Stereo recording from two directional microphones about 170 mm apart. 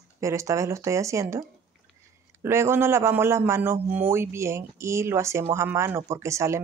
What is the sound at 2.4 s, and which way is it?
Speech, 15° right (ahead or behind).